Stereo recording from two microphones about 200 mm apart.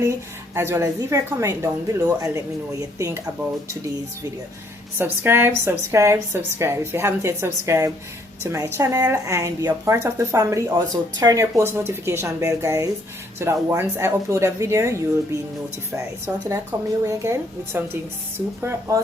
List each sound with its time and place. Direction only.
0.0 s a woman's voice: 15° right (ahead or behind)
4.9 s a woman's voice: 10° right (ahead or behind)
16.2 s a woman's voice: 15° right (ahead or behind)